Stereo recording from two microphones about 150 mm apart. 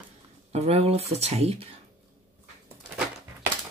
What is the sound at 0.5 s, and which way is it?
Speech, 45° right (ahead or behind).